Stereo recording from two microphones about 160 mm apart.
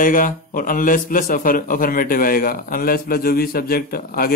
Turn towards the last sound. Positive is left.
turn(degrees=70)  # may be behind; listen again after turning